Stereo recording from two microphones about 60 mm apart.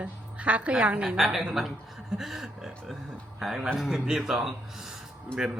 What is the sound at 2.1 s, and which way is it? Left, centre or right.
Speech, centre.